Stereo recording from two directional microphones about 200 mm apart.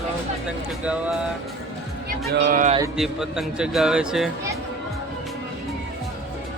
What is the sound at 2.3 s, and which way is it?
Speech, 45° right (ahead or behind).